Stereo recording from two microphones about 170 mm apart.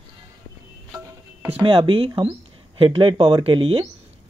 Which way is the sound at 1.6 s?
30° right (ahead or behind).